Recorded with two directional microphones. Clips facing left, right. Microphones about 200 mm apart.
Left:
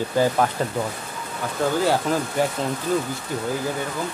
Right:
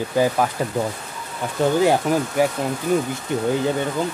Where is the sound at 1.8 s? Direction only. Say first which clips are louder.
Right 3 dB; 15° right (ahead or behind).